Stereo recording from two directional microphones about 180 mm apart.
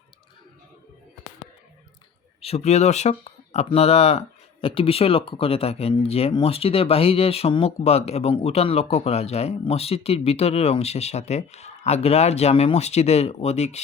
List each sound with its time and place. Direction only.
2.4 s speech: 35° left (ahead or behind)